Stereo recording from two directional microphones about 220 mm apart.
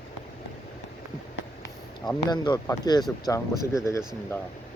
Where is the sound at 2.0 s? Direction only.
20° left (ahead or behind).